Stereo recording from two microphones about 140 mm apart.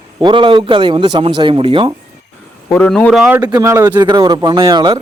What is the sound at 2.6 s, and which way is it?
Speech, 15° left (ahead or behind).